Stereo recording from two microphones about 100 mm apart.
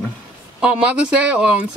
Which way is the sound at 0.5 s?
10° right (ahead or behind).